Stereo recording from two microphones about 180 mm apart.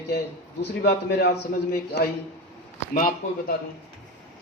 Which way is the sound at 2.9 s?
50° left (ahead or behind).